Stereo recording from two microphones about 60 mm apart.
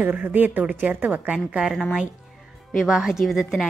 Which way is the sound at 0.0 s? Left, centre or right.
Right.